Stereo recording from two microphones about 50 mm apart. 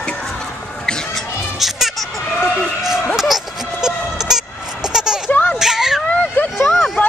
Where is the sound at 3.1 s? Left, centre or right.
Centre.